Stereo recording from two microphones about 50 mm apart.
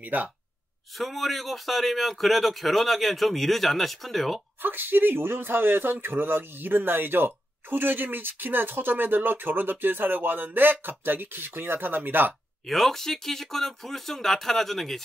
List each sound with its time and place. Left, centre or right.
0.0 s speech: right
0.9 s speech: centre
4.6 s a man's voice: right
12.6 s speech: centre